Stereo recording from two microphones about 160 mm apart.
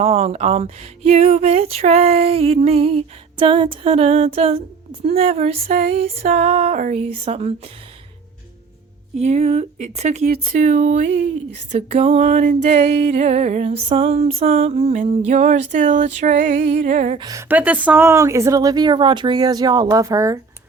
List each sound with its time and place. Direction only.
0.0 s speech: 40° right (ahead or behind)
9.1 s speech: 45° right (ahead or behind)
17.2 s speech: 25° right (ahead or behind)
17.5 s speech: 10° right (ahead or behind)